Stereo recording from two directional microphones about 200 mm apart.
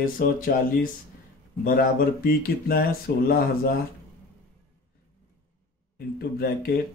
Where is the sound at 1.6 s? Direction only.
45° left (ahead or behind).